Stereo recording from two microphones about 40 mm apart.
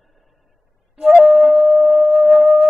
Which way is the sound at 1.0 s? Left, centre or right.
Centre.